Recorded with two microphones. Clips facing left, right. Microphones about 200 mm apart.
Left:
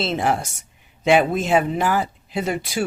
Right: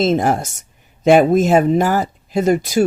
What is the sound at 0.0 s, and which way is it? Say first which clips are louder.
Speech: right 6 dB; 45° right (ahead or behind).